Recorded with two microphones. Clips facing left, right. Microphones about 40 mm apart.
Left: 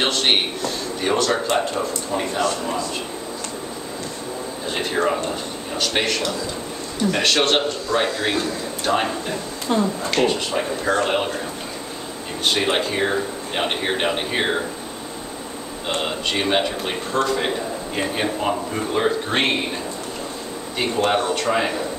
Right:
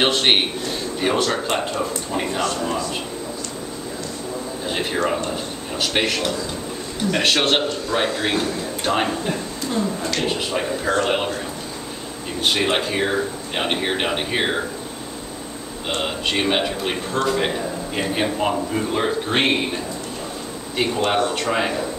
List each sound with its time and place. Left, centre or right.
0.0 s a man's voice: centre
4.6 s a man's voice: centre
9.7 s speech: left
10.2 s a man's voice: centre
12.4 s a man's voice: centre
15.9 s a man's voice: centre
20.7 s speech: centre